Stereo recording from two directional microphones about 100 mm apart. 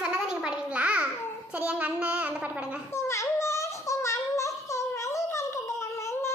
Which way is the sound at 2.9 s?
30° left (ahead or behind).